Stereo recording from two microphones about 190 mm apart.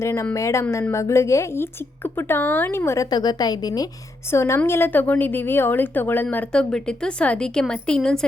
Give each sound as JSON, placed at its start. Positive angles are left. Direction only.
{"t": 0.0, "sound": "a woman's voice", "side_deg": 15}